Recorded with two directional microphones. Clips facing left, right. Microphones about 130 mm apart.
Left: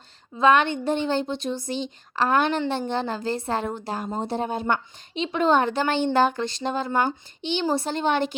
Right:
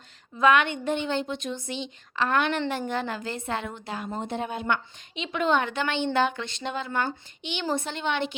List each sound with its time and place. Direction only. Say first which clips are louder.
0.3 s a woman's voice: left 2 dB; 30° left (ahead or behind)